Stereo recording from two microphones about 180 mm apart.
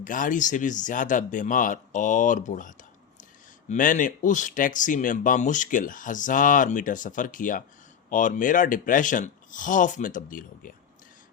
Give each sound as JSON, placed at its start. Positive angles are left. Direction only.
{"t": 0.0, "sound": "speech", "side_deg": 45}